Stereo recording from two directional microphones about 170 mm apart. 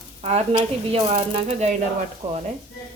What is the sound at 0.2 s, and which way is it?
Speech, 40° right (ahead or behind).